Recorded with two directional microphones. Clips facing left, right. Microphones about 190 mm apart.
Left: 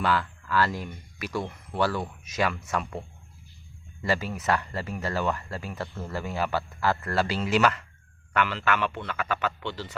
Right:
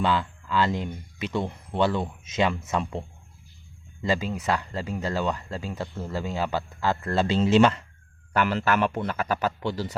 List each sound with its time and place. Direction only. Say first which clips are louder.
0.0 s speech: right 2 dB; 20° right (ahead or behind)
4.0 s speech: right 1 dB; 15° right (ahead or behind)
8.3 s speech: right 3 dB; 40° right (ahead or behind)